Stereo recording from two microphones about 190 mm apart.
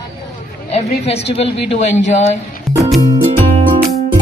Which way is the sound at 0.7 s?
35° left (ahead or behind).